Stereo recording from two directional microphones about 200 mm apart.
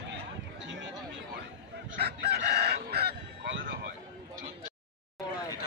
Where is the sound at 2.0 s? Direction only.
55° right (ahead or behind).